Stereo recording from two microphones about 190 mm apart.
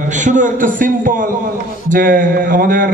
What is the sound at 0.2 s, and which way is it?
A man's voice, 40° right (ahead or behind).